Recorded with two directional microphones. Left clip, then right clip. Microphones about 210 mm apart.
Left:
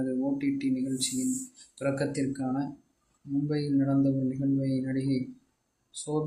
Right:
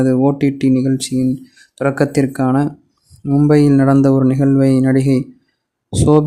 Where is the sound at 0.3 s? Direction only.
50° right (ahead or behind).